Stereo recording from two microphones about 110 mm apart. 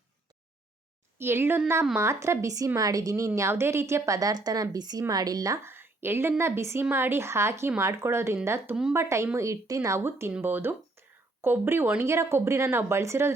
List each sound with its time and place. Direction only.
1.2 s a woman's voice: 20° right (ahead or behind)